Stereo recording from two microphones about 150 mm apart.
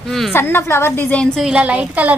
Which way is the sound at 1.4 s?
5° right (ahead or behind).